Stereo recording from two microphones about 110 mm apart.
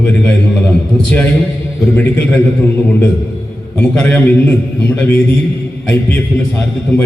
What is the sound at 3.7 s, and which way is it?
A man's voice, 15° left (ahead or behind).